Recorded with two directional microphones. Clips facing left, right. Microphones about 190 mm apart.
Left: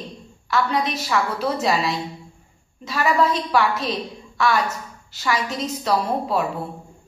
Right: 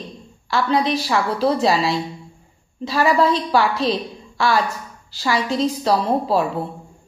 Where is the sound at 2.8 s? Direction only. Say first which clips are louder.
Right 3 dB; 30° right (ahead or behind).